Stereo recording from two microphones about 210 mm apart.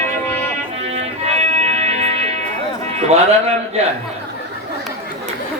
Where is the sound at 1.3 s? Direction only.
30° right (ahead or behind).